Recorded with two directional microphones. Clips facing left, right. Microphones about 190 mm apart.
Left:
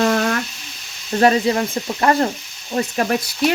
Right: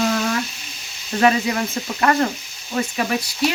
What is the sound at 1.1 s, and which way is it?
Speech, 35° left (ahead or behind).